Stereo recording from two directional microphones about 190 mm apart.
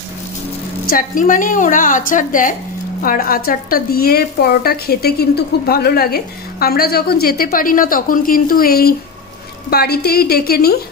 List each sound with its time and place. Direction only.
0.8 s a woman's voice: 45° left (ahead or behind)